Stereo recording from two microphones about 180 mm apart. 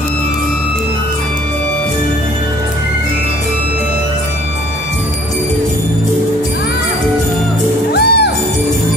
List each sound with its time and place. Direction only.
7.9 s music: 65° left (ahead or behind)